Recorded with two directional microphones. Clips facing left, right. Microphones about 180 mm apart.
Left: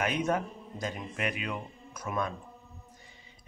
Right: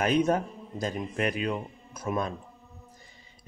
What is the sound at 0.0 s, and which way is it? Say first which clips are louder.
A man's voice: right 5 dB; 35° right (ahead or behind).